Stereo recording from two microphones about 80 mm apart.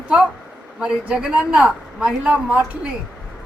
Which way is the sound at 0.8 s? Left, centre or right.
Centre.